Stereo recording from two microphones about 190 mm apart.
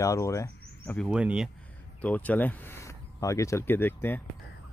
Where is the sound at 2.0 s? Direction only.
5° left (ahead or behind).